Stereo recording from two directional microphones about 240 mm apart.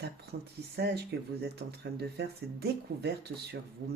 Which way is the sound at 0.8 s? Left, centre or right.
Right.